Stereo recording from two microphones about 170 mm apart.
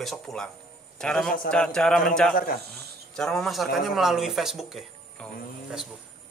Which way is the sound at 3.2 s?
5° left (ahead or behind).